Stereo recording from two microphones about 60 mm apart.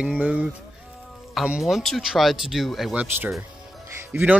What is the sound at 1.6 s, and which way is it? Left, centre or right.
Speech, centre.